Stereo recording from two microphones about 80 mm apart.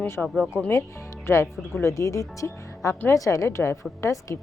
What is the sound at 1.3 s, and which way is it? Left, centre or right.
A woman's voice, left.